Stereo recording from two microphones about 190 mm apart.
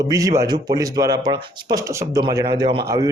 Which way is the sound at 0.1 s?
20° right (ahead or behind).